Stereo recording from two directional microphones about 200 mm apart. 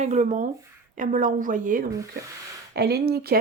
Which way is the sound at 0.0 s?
35° right (ahead or behind).